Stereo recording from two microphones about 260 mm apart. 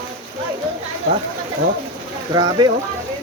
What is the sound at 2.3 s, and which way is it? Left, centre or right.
Speech, centre.